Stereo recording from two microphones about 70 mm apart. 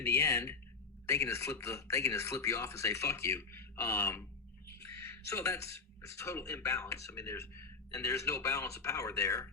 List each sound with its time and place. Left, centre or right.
0.0 s speech: left